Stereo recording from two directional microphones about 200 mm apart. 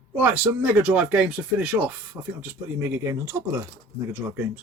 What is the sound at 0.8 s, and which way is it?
Speech, 5° right (ahead or behind).